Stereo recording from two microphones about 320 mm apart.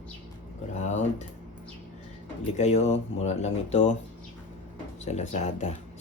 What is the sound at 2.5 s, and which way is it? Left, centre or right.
Speech, left.